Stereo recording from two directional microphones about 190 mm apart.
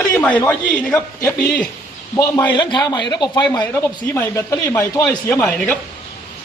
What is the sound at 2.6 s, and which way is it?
A man's voice, 20° left (ahead or behind).